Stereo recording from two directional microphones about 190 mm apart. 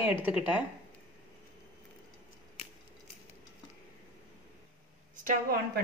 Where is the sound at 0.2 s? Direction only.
5° right (ahead or behind).